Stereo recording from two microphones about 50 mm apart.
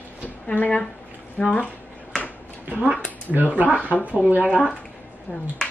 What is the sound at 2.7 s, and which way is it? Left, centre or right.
Speech, right.